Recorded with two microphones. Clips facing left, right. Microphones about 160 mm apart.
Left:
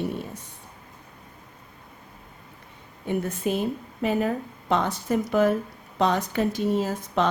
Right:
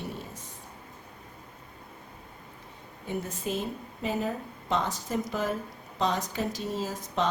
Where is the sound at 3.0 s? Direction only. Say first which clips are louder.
Left 7 dB; 65° left (ahead or behind).